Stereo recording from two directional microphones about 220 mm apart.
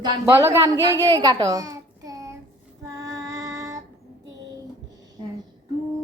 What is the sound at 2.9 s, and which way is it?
Music, 15° right (ahead or behind).